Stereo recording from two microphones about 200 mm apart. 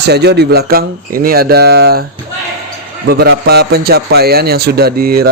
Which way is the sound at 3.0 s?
55° right (ahead or behind).